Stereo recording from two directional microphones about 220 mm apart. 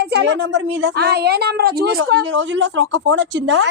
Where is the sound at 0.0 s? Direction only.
50° right (ahead or behind).